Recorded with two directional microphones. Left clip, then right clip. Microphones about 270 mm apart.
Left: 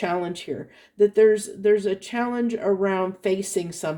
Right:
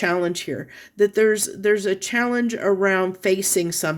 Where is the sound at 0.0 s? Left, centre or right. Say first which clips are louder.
Right 4 dB; right.